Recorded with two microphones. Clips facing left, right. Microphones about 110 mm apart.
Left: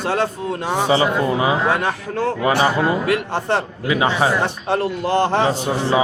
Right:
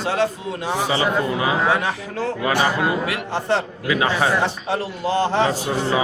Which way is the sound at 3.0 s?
50° left (ahead or behind).